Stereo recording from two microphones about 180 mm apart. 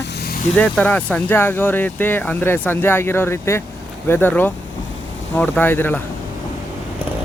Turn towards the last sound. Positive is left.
turn(degrees=10)  # may be behind; listen again after turning